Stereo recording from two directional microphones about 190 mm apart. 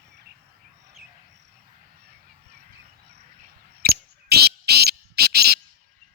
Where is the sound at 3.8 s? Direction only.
55° right (ahead or behind).